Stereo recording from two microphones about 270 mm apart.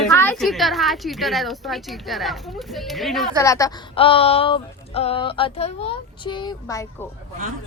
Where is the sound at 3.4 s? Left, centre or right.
Centre.